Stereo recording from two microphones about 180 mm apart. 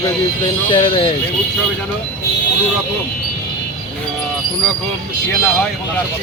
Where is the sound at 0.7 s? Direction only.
30° left (ahead or behind).